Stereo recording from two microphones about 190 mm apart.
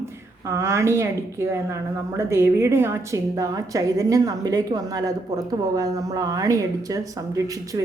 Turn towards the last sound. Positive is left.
turn(degrees=-15)  # may be behind; listen again after turning